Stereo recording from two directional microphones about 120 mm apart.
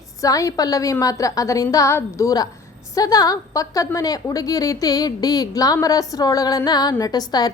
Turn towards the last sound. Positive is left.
turn(degrees=35)  # may be behind; listen again after turning